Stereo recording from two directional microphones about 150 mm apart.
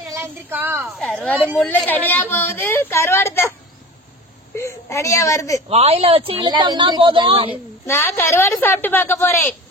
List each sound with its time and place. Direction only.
0.1 s a woman's voice: 15° right (ahead or behind)
0.9 s speech: 5° left (ahead or behind)
1.3 s a woman's voice: 10° right (ahead or behind)
1.8 s a woman's voice: 10° left (ahead or behind)
4.6 s a woman's voice: 20° left (ahead or behind)
5.7 s a woman's voice: 45° right (ahead or behind)
7.8 s a woman's voice: 15° left (ahead or behind)